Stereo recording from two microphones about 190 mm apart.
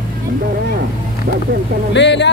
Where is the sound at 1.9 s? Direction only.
65° left (ahead or behind).